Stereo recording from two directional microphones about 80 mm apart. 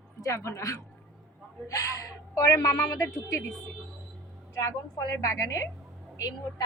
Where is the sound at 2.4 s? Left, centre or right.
Left.